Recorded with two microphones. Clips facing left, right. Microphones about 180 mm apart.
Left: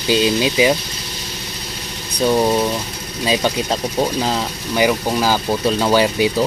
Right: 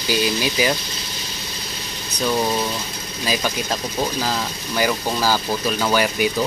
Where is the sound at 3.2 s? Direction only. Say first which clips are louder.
Left 5 dB; 25° left (ahead or behind).